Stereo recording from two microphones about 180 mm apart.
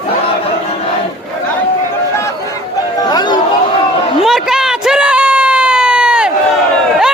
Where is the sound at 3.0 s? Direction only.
20° left (ahead or behind).